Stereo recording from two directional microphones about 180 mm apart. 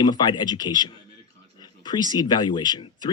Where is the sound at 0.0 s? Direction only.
25° left (ahead or behind).